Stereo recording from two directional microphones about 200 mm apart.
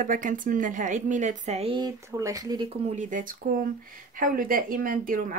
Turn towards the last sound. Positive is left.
turn(degrees=-45)  # may be behind; listen again after turning